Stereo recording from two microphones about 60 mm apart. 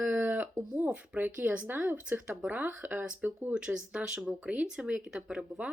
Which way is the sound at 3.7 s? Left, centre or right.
Centre.